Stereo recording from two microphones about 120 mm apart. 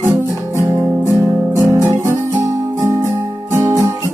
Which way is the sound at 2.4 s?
25° right (ahead or behind).